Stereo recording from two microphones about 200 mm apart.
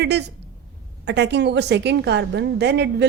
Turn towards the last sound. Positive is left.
turn(degrees=-55)  # may be behind; listen again after turning